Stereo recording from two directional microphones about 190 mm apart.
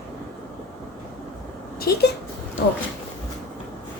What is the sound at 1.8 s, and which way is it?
Speech, 55° left (ahead or behind).